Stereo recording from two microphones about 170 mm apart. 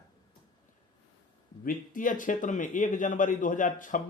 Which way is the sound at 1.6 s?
50° left (ahead or behind).